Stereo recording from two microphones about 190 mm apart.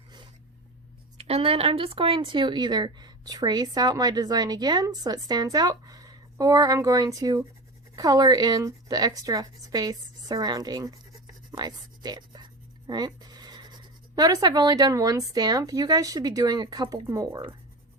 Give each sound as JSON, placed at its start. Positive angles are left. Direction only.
{"t": 1.2, "sound": "speech", "side_deg": -30}